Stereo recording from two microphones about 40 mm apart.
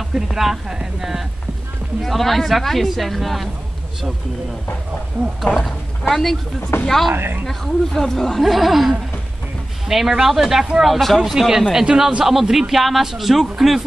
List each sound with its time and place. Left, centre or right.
0.1 s a man's voice: centre
2.0 s speech: centre
5.6 s speech: centre
6.7 s speech: left
7.4 s speech: centre
8.4 s a man's voice: centre
11.3 s a man's voice: centre